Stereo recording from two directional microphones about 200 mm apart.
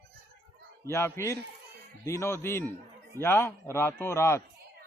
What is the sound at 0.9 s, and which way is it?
Speech, 15° left (ahead or behind).